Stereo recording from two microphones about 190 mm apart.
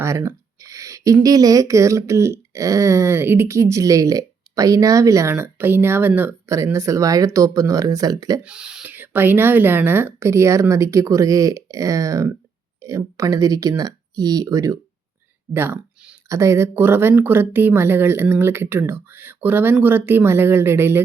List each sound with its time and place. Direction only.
0.0 s speech: 15° right (ahead or behind)
8.4 s speech: 5° right (ahead or behind)